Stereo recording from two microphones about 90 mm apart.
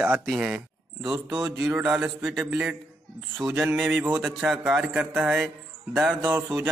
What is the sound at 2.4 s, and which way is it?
Speech, 10° right (ahead or behind).